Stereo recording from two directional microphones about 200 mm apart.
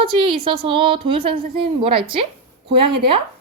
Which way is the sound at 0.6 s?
25° right (ahead or behind).